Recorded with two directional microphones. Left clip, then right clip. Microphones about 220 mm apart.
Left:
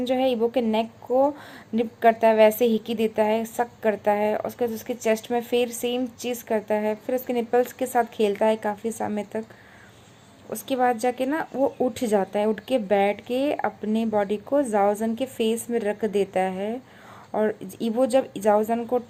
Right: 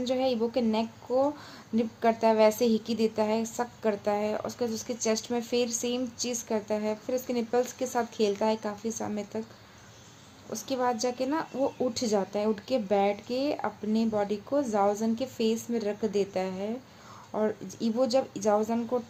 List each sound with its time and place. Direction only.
0.1 s speech: 10° left (ahead or behind)
10.5 s speech: 15° left (ahead or behind)